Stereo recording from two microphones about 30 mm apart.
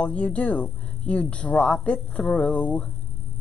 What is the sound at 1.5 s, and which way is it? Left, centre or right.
Speech, left.